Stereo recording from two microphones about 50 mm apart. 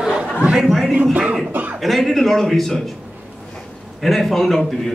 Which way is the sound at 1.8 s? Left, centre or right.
Centre.